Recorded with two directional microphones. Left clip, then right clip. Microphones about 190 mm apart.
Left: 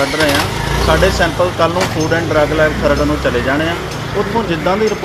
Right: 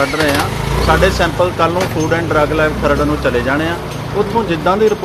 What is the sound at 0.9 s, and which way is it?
Speech, 15° right (ahead or behind).